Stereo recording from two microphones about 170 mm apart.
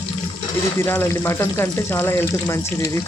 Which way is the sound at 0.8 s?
15° left (ahead or behind).